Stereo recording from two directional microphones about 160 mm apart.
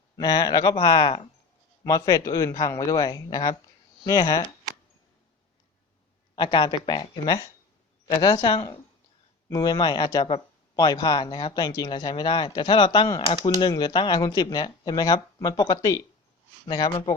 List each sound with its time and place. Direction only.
0.2 s speech: 25° left (ahead or behind)
6.3 s speech: 30° left (ahead or behind)